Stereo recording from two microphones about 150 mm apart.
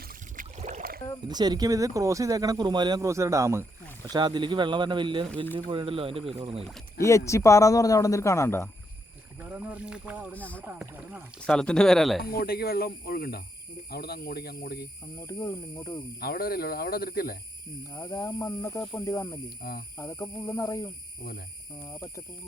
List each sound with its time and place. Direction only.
0.1 s a sound: 60° right (ahead or behind)
1.3 s speech: 25° right (ahead or behind)
7.3 s speech: 20° left (ahead or behind)
9.4 s speech: 10° right (ahead or behind)
10.3 s speech: 10° left (ahead or behind)
10.6 s speech: 10° right (ahead or behind)
11.3 s speech: 5° left (ahead or behind)
12.2 s speech: 90° left
15.3 s speech: 20° left (ahead or behind)
16.2 s speech: 85° left
17.9 s speech: 20° left (ahead or behind)